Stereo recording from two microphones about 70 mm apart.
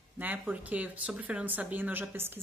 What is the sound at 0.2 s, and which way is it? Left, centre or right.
Speech, right.